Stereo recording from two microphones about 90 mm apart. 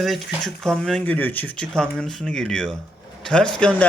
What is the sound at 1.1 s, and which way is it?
Speech, 20° left (ahead or behind).